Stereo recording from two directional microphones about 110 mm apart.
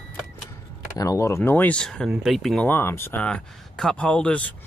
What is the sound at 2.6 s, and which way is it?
Speech, 20° left (ahead or behind).